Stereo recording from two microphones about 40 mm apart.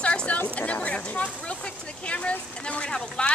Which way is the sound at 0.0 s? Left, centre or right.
Left.